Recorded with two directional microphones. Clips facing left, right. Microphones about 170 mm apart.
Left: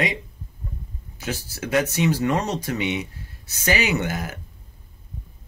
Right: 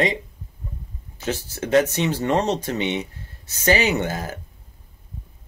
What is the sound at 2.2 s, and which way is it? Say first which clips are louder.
Speech: right 2 dB; 20° right (ahead or behind).